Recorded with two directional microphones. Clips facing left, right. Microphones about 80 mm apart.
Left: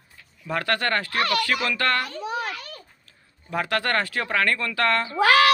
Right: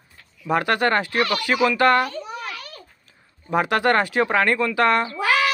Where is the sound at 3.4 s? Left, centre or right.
Right.